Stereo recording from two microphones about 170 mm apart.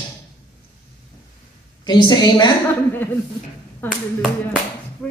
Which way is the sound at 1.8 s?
25° left (ahead or behind).